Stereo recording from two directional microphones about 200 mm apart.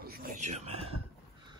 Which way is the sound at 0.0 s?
50° right (ahead or behind).